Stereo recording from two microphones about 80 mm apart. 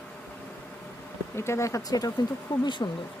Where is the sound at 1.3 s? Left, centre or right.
Left.